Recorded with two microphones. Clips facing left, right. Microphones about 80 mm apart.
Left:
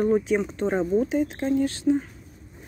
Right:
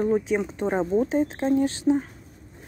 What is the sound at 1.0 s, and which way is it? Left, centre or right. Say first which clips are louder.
Speech: right 1 dB; right.